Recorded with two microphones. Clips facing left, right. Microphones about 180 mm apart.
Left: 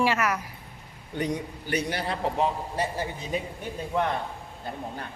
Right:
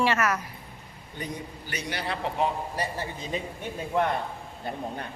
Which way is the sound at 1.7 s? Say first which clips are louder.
Left 4 dB; 50° left (ahead or behind).